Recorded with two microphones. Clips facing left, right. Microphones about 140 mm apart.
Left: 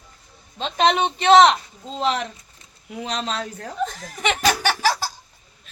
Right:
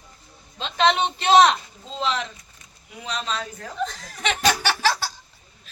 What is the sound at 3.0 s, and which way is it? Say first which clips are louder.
Speech: left 2 dB; 90° left.